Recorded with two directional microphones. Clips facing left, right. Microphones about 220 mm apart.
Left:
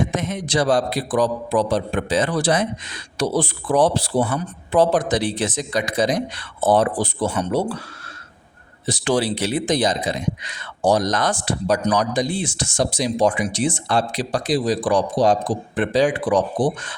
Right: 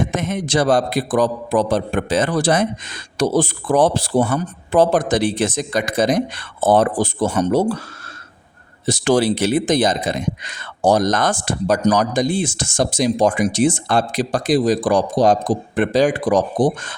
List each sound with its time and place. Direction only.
0.0 s a man's voice: 50° right (ahead or behind)
8.9 s a man's voice: 45° right (ahead or behind)